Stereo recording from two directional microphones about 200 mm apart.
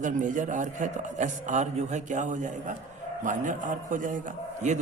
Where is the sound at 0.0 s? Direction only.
40° right (ahead or behind).